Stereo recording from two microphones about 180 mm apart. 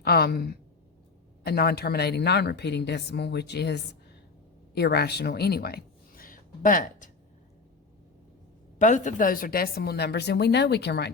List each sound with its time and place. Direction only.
0.0 s a woman's voice: 60° left (ahead or behind)
8.8 s a woman's voice: 45° left (ahead or behind); by 11.1 s 65° left (ahead or behind)